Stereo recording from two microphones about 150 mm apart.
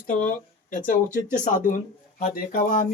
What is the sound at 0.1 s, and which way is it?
Speech, 60° left (ahead or behind).